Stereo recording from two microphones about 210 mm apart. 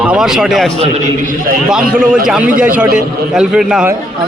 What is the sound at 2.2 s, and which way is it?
A man's voice, centre (ahead or behind).